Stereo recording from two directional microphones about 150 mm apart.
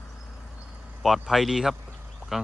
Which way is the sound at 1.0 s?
Centre (ahead or behind).